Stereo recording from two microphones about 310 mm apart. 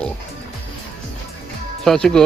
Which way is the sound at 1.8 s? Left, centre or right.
Centre.